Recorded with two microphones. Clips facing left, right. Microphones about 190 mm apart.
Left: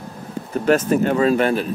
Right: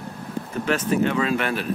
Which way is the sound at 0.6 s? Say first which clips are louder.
Left 5 dB; 45° left (ahead or behind).